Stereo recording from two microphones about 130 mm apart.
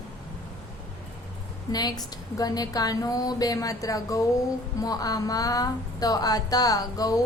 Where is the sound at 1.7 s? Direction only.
30° left (ahead or behind).